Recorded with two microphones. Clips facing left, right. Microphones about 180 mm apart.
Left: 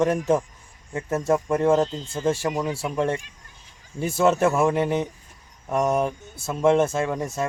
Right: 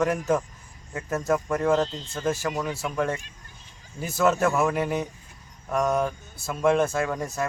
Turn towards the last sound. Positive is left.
turn(degrees=25)  # may be behind; listen again after turning